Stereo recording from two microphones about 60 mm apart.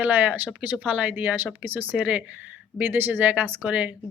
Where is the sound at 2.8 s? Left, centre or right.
Right.